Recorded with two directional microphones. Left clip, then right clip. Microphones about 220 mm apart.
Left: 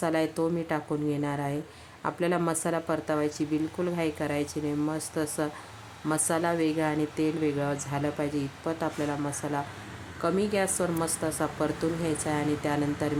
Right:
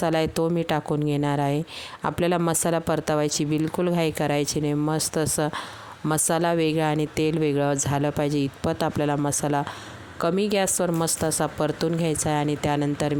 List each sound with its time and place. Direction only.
0.0 s speech: 40° right (ahead or behind)